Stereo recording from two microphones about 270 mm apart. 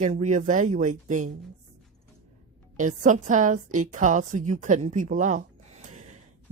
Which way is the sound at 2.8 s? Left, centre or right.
Right.